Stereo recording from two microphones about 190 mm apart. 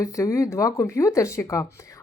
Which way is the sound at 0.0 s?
15° left (ahead or behind).